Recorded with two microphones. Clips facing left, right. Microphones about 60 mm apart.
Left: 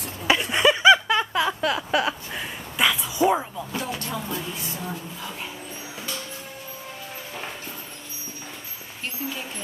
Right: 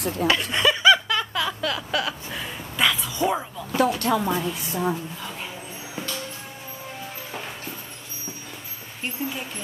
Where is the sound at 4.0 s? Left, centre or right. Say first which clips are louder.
Right 9 dB; right.